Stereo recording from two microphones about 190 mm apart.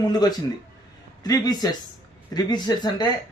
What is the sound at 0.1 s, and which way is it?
Speech, 20° left (ahead or behind).